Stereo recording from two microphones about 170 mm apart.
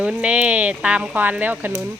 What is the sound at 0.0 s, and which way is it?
Speech, 5° right (ahead or behind).